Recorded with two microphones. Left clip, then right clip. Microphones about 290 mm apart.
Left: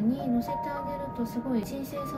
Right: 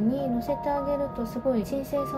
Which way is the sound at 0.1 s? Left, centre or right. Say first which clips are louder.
Right 2 dB; right.